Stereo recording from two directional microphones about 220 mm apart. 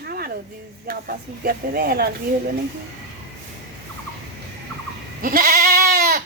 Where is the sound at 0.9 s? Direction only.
40° right (ahead or behind).